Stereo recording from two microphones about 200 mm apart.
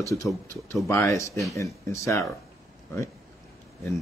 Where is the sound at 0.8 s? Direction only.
15° left (ahead or behind).